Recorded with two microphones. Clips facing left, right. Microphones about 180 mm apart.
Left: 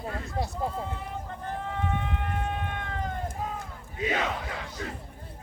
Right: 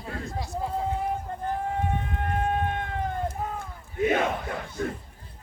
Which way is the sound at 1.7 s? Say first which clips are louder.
Right 2 dB; 45° right (ahead or behind).